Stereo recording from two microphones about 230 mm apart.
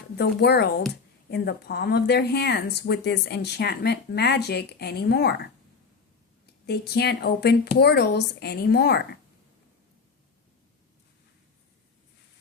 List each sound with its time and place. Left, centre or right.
0.2 s speech: left